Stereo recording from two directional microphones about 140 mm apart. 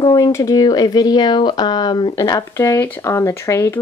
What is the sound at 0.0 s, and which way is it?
Speech, 25° left (ahead or behind).